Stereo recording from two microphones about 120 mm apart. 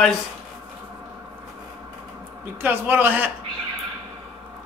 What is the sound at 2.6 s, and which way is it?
Speech, 15° right (ahead or behind).